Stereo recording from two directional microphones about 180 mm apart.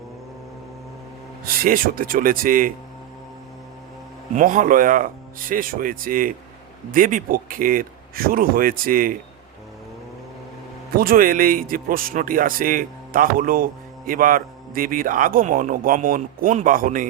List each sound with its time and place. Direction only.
1.5 s speech: 55° right (ahead or behind)
4.4 s speech: 45° right (ahead or behind)
10.9 s speech: 55° right (ahead or behind)